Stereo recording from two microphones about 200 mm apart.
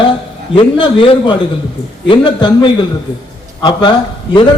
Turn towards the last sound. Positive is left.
turn(degrees=25)  # may be behind; listen again after turning